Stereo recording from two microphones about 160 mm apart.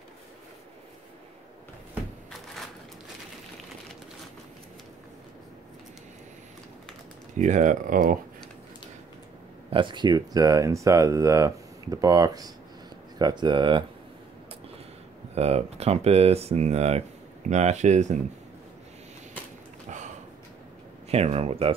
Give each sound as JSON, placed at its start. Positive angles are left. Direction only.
{"t": 7.3, "sound": "speech", "side_deg": -50}
{"t": 9.7, "sound": "speech", "side_deg": -30}
{"t": 15.3, "sound": "speech", "side_deg": -40}
{"t": 21.1, "sound": "speech", "side_deg": -40}